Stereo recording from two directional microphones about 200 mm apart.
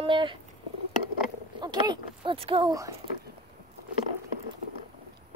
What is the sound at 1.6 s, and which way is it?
Speech, 20° right (ahead or behind).